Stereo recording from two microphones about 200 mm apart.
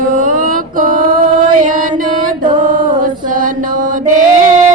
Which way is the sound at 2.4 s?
40° right (ahead or behind).